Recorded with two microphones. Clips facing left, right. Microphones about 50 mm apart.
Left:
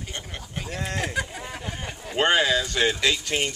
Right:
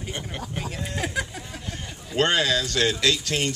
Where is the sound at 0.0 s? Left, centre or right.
Centre.